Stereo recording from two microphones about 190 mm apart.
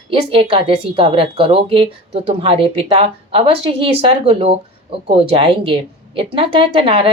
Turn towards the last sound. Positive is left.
turn(degrees=-30)  # may be behind; listen again after turning